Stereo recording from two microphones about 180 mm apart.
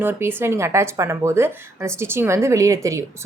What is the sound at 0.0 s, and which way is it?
Speech, 10° right (ahead or behind).